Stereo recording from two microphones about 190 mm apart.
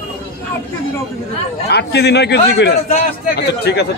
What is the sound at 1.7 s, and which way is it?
A man's voice, 60° left (ahead or behind).